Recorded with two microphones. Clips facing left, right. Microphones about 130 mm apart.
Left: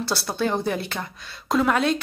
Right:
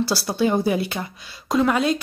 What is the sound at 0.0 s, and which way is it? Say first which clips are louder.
Speech: right 4 dB; 5° right (ahead or behind).